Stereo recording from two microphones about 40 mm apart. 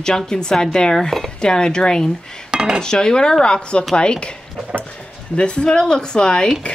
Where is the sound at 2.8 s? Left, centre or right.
Centre.